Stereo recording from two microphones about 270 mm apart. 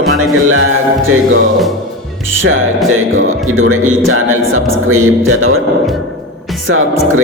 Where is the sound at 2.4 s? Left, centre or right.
Right.